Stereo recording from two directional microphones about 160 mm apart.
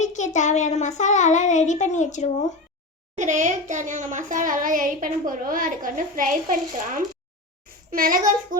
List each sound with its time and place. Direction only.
0.0 s a sound: 50° left (ahead or behind)
0.3 s a child's voice: 50° left (ahead or behind)
3.2 s a child's voice: 50° right (ahead or behind)